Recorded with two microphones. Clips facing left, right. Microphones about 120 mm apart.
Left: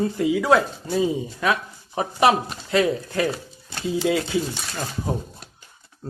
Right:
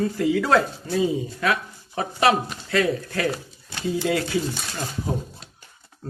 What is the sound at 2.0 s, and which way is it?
Speech, 20° left (ahead or behind).